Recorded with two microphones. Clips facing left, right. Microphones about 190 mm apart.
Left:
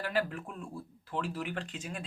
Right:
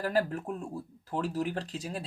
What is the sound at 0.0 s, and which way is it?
Speech, 40° right (ahead or behind).